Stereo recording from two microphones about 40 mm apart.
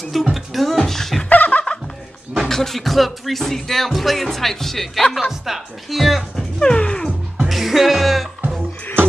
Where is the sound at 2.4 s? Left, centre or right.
Centre.